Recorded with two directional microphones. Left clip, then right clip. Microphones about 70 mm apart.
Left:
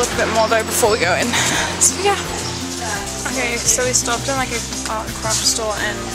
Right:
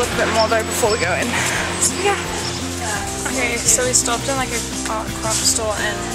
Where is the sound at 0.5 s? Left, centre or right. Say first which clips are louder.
Left 1 dB; left.